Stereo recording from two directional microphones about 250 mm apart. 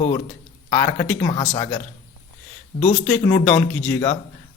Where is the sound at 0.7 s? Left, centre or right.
Left.